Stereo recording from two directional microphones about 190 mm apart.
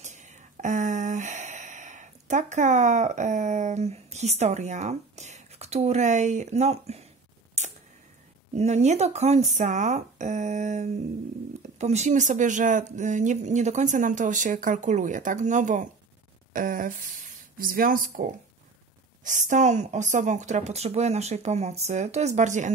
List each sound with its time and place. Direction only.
0.0 s speech: 40° right (ahead or behind)
8.5 s speech: 35° right (ahead or behind)